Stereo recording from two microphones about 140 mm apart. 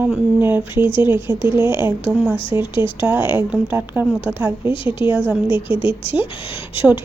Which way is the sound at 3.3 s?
15° right (ahead or behind).